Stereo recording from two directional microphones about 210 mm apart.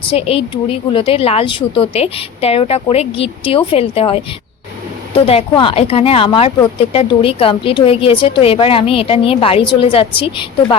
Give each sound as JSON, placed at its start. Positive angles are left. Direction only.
{"t": 0.1, "sound": "a woman's voice", "side_deg": 25}